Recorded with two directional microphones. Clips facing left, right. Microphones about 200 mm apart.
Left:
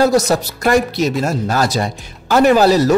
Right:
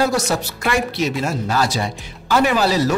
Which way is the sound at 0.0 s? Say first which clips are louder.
Left 6 dB; 40° left (ahead or behind).